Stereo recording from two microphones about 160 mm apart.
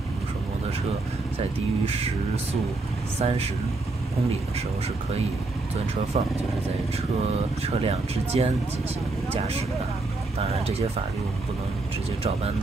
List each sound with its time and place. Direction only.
3.2 s speech: 40° right (ahead or behind)
6.1 s speech: 35° right (ahead or behind)
10.5 s speech: 40° right (ahead or behind)